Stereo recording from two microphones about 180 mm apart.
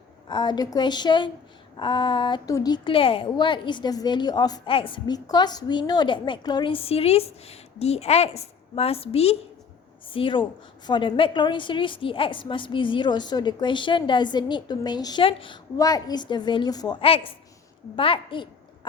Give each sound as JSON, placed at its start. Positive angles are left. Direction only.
{"t": 0.3, "sound": "a woman's voice", "side_deg": 25}